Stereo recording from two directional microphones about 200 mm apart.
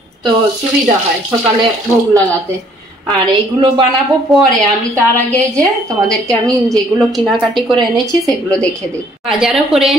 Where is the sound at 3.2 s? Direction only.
25° right (ahead or behind).